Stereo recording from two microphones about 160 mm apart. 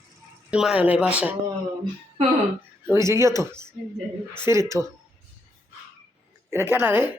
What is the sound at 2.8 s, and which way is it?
Speech, 15° right (ahead or behind).